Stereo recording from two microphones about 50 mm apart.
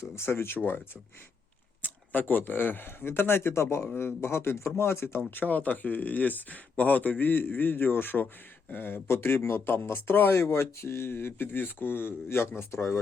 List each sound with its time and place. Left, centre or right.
0.3 s speech: left
1.8 s speech: left
5.3 s speech: left
9.0 s speech: left
9.8 s speech: left
10.4 s speech: left